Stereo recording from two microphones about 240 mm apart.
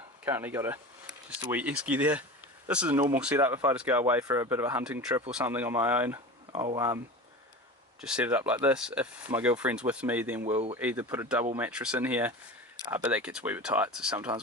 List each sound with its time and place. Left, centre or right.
0.3 s speech: centre
8.0 s speech: centre
10.5 s speech: right
10.8 s speech: centre